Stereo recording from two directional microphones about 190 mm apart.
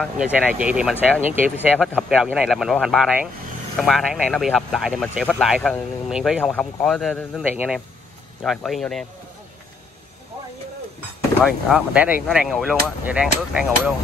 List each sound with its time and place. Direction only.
0.0 s speech: 5° right (ahead or behind)
11.4 s speech: 5° right (ahead or behind)